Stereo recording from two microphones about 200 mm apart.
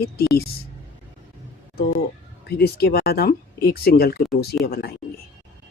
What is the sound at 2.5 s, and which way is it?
Speech, 50° left (ahead or behind).